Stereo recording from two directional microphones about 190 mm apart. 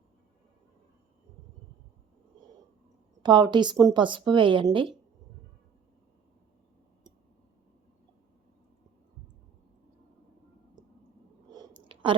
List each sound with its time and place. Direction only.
3.2 s speech: 25° right (ahead or behind)